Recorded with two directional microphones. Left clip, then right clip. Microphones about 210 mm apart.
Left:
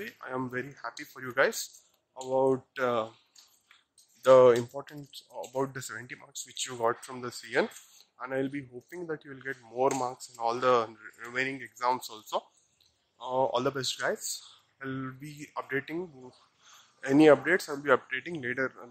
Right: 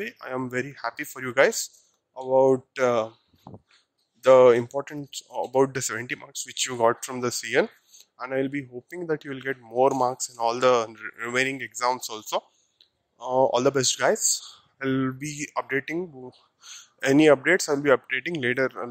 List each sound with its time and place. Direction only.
0.0 s speech: 35° right (ahead or behind)
4.2 s speech: 35° right (ahead or behind)